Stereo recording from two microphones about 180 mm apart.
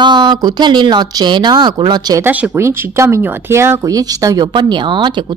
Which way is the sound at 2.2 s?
10° right (ahead or behind).